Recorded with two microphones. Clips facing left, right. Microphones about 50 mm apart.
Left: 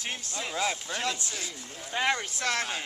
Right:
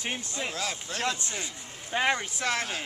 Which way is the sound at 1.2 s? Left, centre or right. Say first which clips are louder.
Right 1 dB; right.